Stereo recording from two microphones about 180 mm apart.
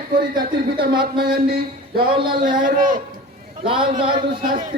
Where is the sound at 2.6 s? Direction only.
50° right (ahead or behind).